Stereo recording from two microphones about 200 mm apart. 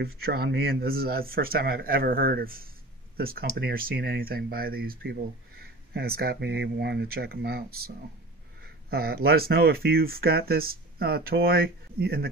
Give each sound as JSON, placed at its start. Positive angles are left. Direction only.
{"t": 0.0, "sound": "speech", "side_deg": -50}
{"t": 8.9, "sound": "speech", "side_deg": -50}